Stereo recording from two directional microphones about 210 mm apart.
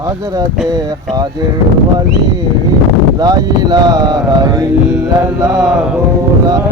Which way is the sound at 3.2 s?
20° right (ahead or behind).